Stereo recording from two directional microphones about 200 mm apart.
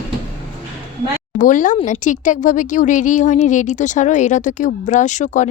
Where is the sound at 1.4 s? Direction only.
40° left (ahead or behind).